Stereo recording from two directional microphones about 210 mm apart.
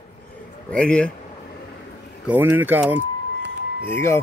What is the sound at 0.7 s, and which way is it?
Speech, 5° left (ahead or behind).